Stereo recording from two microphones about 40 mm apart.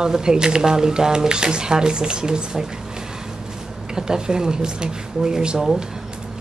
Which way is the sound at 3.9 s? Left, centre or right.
Centre.